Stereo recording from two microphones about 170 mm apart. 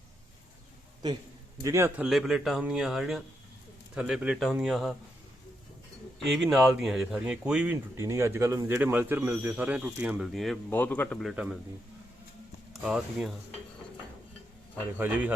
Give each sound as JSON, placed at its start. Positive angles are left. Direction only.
{"t": 1.6, "sound": "speech", "side_deg": -15}
{"t": 2.0, "sound": "a man's voice", "side_deg": 0}
{"t": 6.1, "sound": "speech", "side_deg": 0}
{"t": 12.7, "sound": "a man's voice", "side_deg": 0}
{"t": 14.9, "sound": "speech", "side_deg": -10}